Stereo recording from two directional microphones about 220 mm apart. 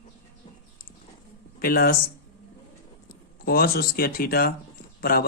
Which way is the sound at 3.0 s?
45° left (ahead or behind).